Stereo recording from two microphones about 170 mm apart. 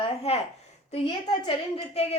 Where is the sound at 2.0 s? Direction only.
35° left (ahead or behind).